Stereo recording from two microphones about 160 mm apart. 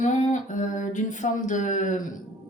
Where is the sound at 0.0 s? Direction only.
50° left (ahead or behind).